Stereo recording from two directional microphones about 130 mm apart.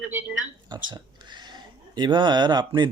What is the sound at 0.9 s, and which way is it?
Speech, 35° right (ahead or behind).